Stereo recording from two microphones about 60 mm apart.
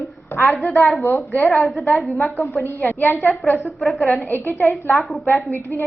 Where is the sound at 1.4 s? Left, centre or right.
Left.